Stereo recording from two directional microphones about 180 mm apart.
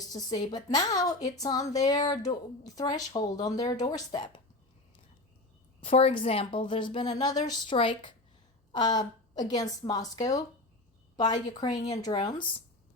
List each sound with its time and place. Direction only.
0.0 s speech: 20° left (ahead or behind)
5.8 s speech: 30° left (ahead or behind)